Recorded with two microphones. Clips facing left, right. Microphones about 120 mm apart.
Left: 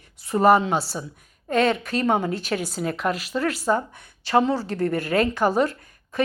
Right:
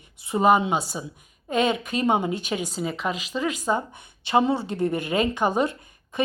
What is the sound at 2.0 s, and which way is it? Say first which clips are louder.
Speech: even; 20° right (ahead or behind).